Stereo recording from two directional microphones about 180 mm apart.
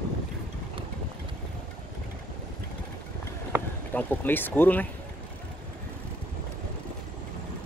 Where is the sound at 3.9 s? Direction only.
10° left (ahead or behind).